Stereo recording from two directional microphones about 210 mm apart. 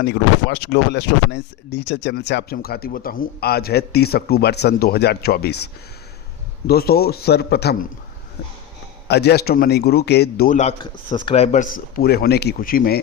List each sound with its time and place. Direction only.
0.0 s speech: 55° left (ahead or behind)
9.0 s speech: 50° left (ahead or behind)